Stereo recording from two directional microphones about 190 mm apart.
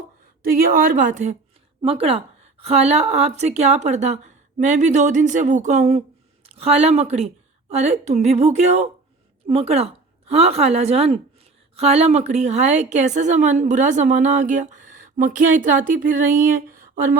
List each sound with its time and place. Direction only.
0.4 s a woman's voice: 50° right (ahead or behind)